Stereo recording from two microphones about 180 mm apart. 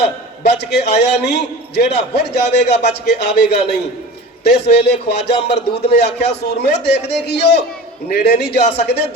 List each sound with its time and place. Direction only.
0.4 s a man's voice: 70° left (ahead or behind)